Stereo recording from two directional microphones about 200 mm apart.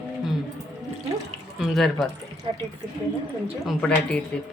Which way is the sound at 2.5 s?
25° right (ahead or behind).